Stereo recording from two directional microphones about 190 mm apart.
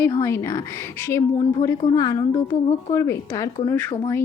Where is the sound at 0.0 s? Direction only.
15° left (ahead or behind).